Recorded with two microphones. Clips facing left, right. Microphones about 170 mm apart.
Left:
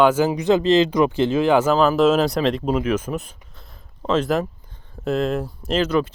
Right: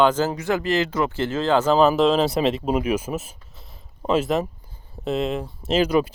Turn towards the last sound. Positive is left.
turn(degrees=-10)  # may be behind; listen again after turning